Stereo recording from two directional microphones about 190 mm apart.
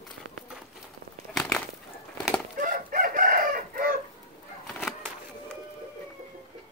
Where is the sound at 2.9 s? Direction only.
45° right (ahead or behind).